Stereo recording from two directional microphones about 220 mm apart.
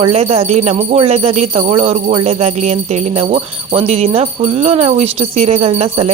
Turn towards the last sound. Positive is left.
turn(degrees=-30)  # may be behind; listen again after turning